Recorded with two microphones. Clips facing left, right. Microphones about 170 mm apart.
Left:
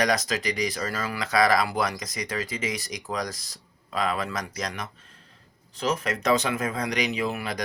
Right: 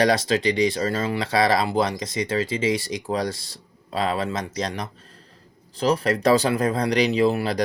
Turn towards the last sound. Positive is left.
turn(degrees=-30)  # may be behind; listen again after turning